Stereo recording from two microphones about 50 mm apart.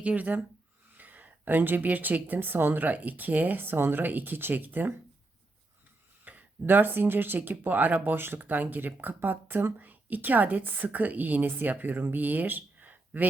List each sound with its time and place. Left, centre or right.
0.0 s speech: right
6.3 s a sound: right
6.7 s speech: right